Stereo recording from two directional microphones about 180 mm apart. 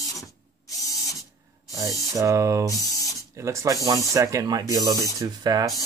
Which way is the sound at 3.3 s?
15° right (ahead or behind).